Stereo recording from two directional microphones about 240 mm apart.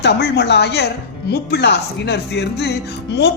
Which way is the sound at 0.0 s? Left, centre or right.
Left.